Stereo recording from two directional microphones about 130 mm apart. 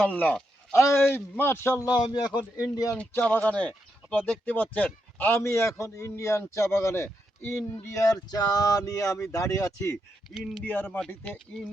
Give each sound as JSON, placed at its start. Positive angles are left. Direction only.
{"t": 0.1, "sound": "a man's voice", "side_deg": 10}
{"t": 2.0, "sound": "a man's voice", "side_deg": 35}
{"t": 3.0, "sound": "a man's voice", "side_deg": 10}
{"t": 10.3, "sound": "speech", "side_deg": 0}
{"t": 10.6, "sound": "speech", "side_deg": 15}